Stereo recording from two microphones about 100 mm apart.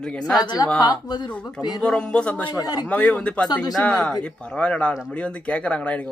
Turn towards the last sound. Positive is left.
turn(degrees=15)  # may be behind; listen again after turning